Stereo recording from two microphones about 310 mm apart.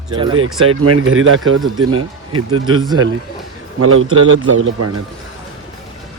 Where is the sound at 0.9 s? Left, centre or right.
Right.